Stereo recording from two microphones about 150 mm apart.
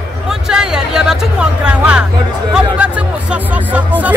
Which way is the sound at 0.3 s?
5° right (ahead or behind).